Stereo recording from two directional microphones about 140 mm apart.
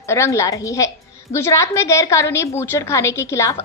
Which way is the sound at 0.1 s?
20° left (ahead or behind).